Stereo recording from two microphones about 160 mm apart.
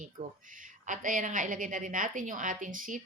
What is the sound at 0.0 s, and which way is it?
A woman's voice, 55° right (ahead or behind).